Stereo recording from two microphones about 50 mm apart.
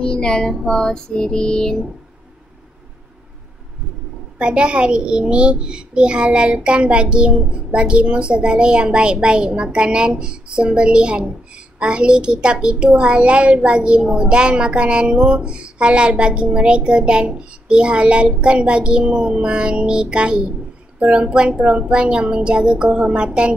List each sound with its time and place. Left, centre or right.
0.0 s child singing: centre
4.4 s a child's voice: right